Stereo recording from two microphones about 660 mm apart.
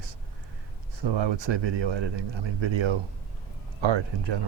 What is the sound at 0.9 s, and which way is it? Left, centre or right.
Speech, right.